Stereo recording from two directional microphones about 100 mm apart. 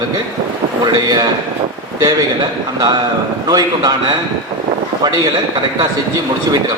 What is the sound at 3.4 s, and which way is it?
Speech, 40° right (ahead or behind).